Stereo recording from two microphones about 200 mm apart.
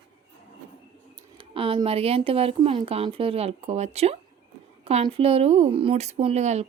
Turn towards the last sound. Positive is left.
turn(degrees=-35)  # may be behind; listen again after turning